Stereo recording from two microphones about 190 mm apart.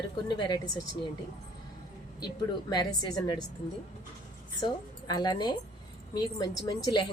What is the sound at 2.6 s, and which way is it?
Speech, 20° left (ahead or behind).